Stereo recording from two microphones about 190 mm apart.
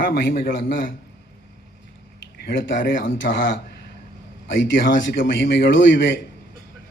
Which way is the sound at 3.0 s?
75° left (ahead or behind).